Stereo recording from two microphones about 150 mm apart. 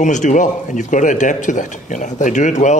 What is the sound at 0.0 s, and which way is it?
Speech, 55° left (ahead or behind).